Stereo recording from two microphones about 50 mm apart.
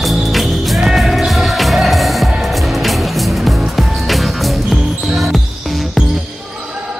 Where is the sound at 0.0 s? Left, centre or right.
Centre.